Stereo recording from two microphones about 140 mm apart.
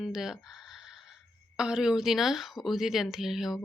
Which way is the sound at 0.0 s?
5° right (ahead or behind).